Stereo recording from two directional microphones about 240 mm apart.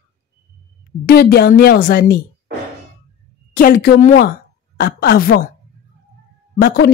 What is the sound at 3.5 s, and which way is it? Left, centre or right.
Speech, left.